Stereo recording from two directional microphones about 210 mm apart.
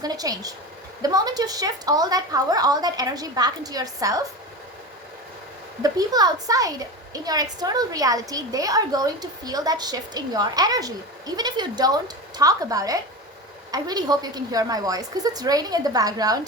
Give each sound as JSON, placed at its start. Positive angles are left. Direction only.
{"t": 0.0, "sound": "a woman's voice", "side_deg": -20}
{"t": 5.8, "sound": "a woman's voice", "side_deg": -20}